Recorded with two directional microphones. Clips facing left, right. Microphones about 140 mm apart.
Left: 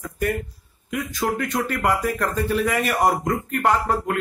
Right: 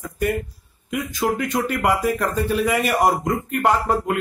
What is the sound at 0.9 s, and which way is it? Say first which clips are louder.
A man's voice: right 2 dB; 15° right (ahead or behind).